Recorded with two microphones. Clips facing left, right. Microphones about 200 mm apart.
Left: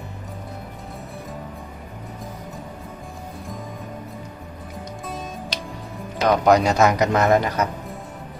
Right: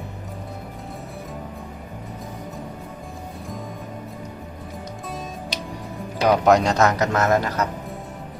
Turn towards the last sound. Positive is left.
turn(degrees=15)  # may be behind; listen again after turning